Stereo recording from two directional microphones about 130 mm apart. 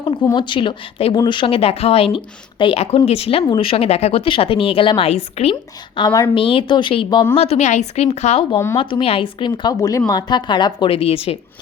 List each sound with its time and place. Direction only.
0.3 s a woman's voice: 40° left (ahead or behind)
6.0 s a woman's voice: 35° left (ahead or behind)
6.3 s a woman's voice: 45° left (ahead or behind)
8.7 s a woman's voice: 40° left (ahead or behind)